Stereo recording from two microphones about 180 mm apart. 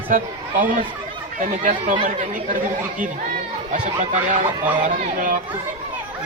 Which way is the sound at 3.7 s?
45° right (ahead or behind).